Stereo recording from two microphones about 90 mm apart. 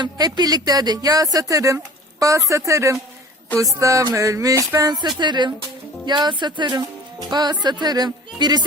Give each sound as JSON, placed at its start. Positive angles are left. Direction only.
{"t": 0.0, "sound": "speech", "side_deg": -50}
{"t": 5.2, "sound": "speech", "side_deg": -55}